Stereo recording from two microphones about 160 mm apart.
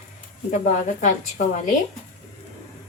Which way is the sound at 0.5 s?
50° left (ahead or behind).